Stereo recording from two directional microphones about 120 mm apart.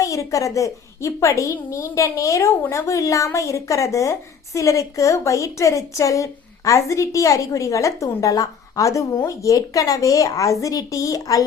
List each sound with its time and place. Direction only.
0.0 s a woman's voice: 25° left (ahead or behind)